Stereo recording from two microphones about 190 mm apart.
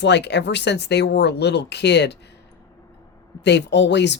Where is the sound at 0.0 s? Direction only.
65° left (ahead or behind).